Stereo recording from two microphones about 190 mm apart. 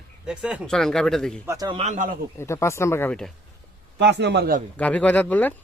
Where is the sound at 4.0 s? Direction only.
65° right (ahead or behind).